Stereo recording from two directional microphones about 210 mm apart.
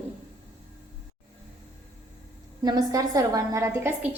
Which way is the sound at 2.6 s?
15° right (ahead or behind).